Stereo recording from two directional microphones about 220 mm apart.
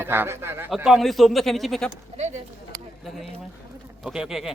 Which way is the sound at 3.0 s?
Centre (ahead or behind).